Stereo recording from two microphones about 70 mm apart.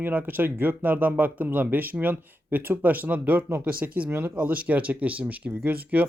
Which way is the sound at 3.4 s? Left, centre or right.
Right.